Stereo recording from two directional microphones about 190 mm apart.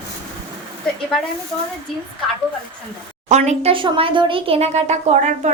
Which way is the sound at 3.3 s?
35° right (ahead or behind).